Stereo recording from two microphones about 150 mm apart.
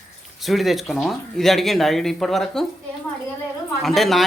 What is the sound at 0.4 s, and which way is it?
Speech, centre (ahead or behind).